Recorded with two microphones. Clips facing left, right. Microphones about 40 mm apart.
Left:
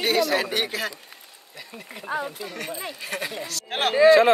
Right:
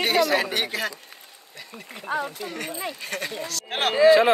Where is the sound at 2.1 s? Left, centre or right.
Right.